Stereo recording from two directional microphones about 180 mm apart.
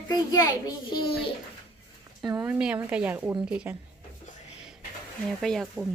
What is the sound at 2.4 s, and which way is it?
Speech, 5° right (ahead or behind).